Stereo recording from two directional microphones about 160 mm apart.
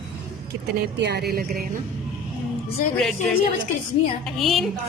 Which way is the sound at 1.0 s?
90° right.